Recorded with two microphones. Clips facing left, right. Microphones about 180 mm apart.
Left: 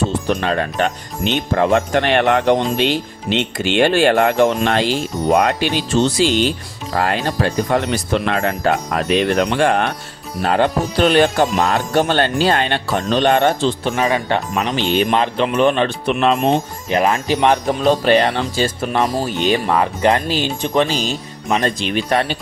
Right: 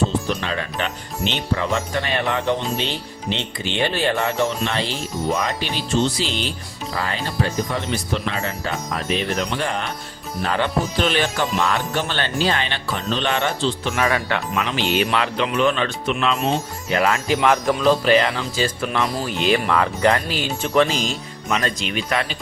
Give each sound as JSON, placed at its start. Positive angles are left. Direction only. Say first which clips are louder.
{"t": 0.3, "sound": "speech", "louder": "left 6 dB", "side_deg": 50}
{"t": 4.9, "sound": "speech", "louder": "left 7 dB", "side_deg": 65}
{"t": 6.9, "sound": "speech", "louder": "left 6 dB", "side_deg": 60}
{"t": 10.4, "sound": "speech", "louder": "left 5 dB", "side_deg": 45}
{"t": 13.9, "sound": "speech", "louder": "left 3 dB", "side_deg": 25}
{"t": 14.3, "sound": "speech", "louder": "left 4 dB", "side_deg": 40}
{"t": 16.9, "sound": "speech", "louder": "left 3 dB", "side_deg": 20}
{"t": 18.6, "sound": "speech", "louder": "left 3 dB", "side_deg": 45}
{"t": 19.2, "sound": "speech", "louder": "left 2 dB", "side_deg": 30}